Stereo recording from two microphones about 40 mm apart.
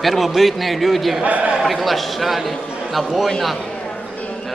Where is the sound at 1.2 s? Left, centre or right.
Right.